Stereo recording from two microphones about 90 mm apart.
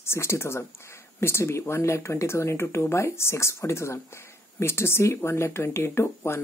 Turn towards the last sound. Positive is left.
turn(degrees=30)  # may be behind; listen again after turning